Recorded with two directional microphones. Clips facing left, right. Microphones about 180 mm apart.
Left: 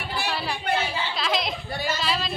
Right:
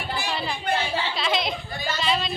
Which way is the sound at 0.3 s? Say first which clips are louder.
Left 1 dB; 5° left (ahead or behind).